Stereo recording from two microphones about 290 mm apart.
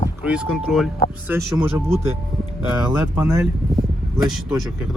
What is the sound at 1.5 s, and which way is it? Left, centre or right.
Speech, centre.